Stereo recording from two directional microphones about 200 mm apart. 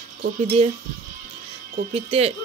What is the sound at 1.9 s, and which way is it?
Speech, 30° right (ahead or behind).